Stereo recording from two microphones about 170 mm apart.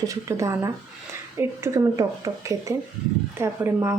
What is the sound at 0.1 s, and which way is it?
Speech, 20° right (ahead or behind).